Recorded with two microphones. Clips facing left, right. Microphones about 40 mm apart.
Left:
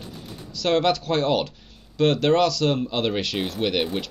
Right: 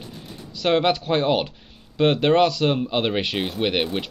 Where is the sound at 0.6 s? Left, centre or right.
Centre.